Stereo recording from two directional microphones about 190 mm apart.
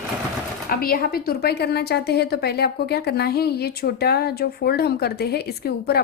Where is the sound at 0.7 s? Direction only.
50° left (ahead or behind).